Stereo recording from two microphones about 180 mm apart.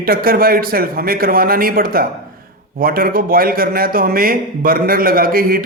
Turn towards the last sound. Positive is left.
turn(degrees=-55)  # may be behind; listen again after turning